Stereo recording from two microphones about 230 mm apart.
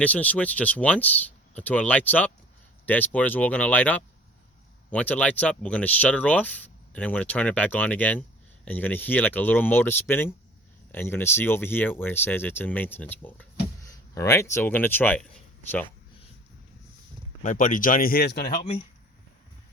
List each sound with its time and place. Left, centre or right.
0.0 s speech: centre
17.4 s speech: left